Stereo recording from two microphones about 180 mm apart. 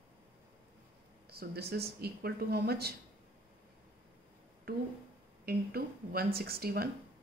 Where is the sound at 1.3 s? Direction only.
60° right (ahead or behind).